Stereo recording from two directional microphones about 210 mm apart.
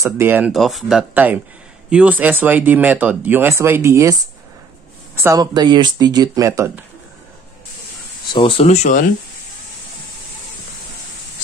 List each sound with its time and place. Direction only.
0.0 s speech: 10° right (ahead or behind)
8.3 s speech: 25° left (ahead or behind)